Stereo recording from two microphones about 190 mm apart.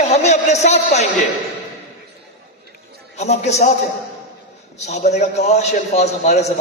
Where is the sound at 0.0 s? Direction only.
35° left (ahead or behind).